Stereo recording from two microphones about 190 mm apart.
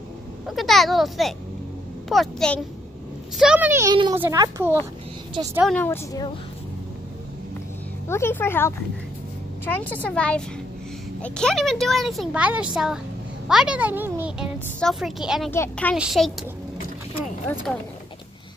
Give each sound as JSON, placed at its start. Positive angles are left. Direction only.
{"t": 0.5, "sound": "speech", "side_deg": 0}
{"t": 3.9, "sound": "a child's voice", "side_deg": -25}
{"t": 5.7, "sound": "a woman's voice", "side_deg": 10}
{"t": 8.1, "sound": "a woman's voice", "side_deg": 10}
{"t": 15.5, "sound": "a woman's voice", "side_deg": 10}
{"t": 16.0, "sound": "speech", "side_deg": 0}
{"t": 17.7, "sound": "speech", "side_deg": 5}